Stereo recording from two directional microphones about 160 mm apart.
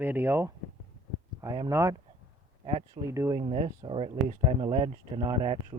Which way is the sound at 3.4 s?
35° right (ahead or behind).